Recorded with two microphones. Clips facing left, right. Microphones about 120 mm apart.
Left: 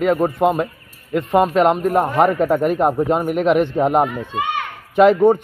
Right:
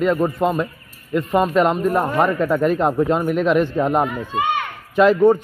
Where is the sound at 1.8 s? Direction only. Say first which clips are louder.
Left 2 dB; 60° left (ahead or behind).